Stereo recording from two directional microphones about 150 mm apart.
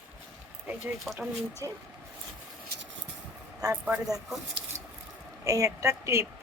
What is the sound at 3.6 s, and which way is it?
Speech, 25° right (ahead or behind).